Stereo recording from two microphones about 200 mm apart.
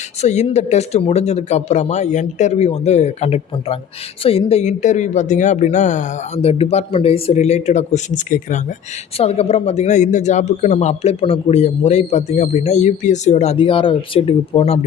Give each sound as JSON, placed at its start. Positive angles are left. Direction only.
{"t": 0.2, "sound": "a man's voice", "side_deg": 35}